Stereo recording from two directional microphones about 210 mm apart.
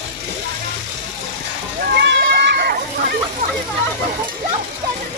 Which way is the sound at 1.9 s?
55° right (ahead or behind).